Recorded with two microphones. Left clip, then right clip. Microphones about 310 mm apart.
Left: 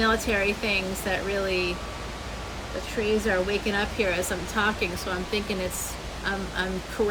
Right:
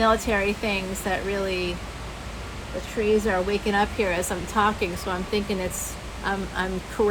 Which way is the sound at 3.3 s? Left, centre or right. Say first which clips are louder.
Right 1 dB; centre.